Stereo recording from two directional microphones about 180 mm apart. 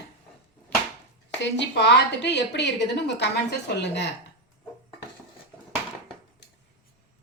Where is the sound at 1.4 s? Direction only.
75° left (ahead or behind).